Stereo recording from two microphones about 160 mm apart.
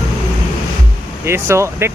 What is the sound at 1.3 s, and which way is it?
Speech, 15° right (ahead or behind).